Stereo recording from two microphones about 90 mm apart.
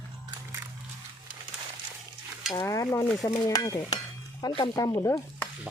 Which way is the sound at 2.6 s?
35° left (ahead or behind).